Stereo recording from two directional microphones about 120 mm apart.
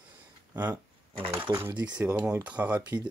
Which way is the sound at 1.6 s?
20° right (ahead or behind).